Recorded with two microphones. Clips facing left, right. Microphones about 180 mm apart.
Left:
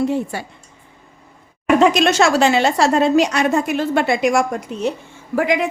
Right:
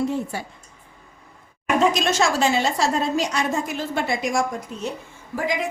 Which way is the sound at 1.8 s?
70° left (ahead or behind).